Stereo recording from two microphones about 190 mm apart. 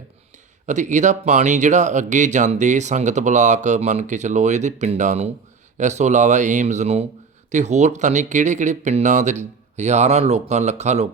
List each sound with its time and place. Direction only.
0.7 s speech: 40° right (ahead or behind)